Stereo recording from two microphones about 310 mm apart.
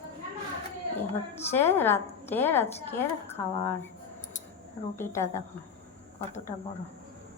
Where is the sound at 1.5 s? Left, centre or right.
Centre.